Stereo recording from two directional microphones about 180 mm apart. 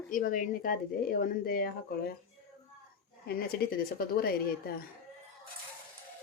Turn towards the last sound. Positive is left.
turn(degrees=60)  # may be behind; listen again after turning